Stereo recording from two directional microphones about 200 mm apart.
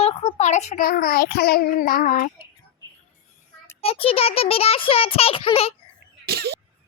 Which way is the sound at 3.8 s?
30° left (ahead or behind).